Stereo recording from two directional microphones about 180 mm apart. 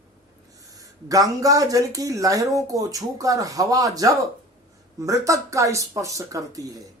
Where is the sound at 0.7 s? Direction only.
20° right (ahead or behind).